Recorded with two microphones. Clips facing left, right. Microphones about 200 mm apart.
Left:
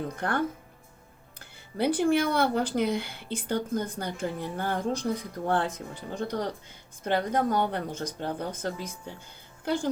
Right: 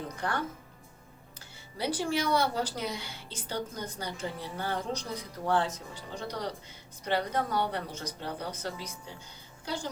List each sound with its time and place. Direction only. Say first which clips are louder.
0.2 s speech: left 4 dB; 55° left (ahead or behind)